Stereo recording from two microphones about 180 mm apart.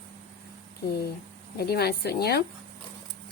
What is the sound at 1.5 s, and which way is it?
Speech, 60° left (ahead or behind).